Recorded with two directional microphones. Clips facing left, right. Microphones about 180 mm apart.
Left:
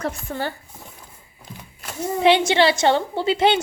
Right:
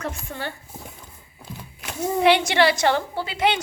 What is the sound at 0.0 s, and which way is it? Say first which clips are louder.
Speech: left 4 dB; 35° left (ahead or behind).